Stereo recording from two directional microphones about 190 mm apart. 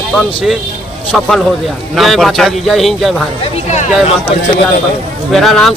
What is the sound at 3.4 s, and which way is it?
Speech, 40° left (ahead or behind).